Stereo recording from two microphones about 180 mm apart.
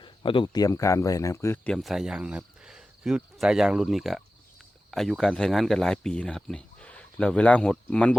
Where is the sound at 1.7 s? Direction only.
Centre (ahead or behind).